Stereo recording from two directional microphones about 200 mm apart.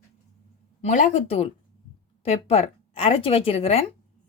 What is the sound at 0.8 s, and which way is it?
Speech, 40° left (ahead or behind).